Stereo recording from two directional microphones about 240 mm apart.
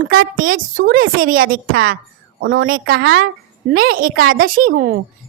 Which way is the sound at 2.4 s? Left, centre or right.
Right.